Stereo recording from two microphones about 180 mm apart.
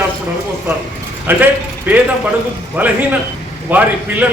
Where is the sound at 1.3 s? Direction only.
10° right (ahead or behind).